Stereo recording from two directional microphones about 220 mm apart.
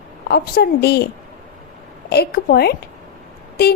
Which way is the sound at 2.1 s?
45° left (ahead or behind).